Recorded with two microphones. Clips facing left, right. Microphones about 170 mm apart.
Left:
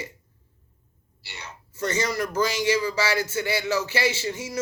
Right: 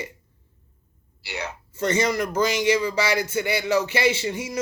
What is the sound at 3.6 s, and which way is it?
Speech, 60° right (ahead or behind).